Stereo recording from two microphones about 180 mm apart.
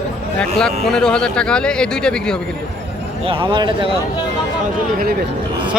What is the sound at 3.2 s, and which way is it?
Speech, 30° right (ahead or behind).